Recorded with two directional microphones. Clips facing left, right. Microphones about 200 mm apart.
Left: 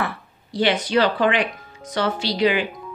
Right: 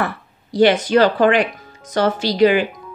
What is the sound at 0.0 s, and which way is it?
A woman's voice, 45° right (ahead or behind).